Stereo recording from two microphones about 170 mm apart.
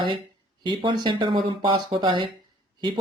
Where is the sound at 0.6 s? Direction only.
30° right (ahead or behind).